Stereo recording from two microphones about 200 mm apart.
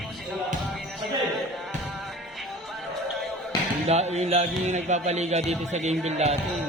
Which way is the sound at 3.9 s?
35° right (ahead or behind).